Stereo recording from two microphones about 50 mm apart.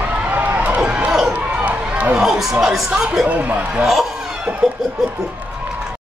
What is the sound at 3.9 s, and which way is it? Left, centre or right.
Snicker, centre.